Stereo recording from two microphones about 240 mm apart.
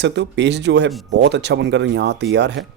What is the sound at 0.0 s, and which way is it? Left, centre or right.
Speech, right.